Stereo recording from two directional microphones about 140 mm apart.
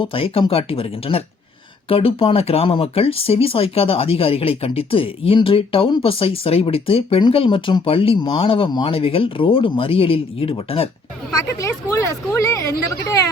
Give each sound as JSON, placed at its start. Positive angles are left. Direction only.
{"t": 0.0, "sound": "speech", "side_deg": 40}
{"t": 11.3, "sound": "speech", "side_deg": 25}